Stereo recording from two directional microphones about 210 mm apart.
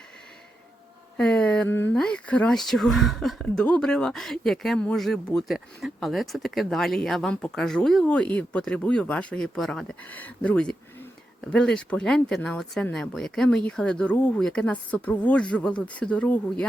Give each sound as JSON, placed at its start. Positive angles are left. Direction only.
{"t": 1.1, "sound": "speech", "side_deg": 5}